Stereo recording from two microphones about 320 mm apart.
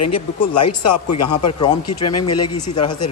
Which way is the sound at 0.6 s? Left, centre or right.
Left.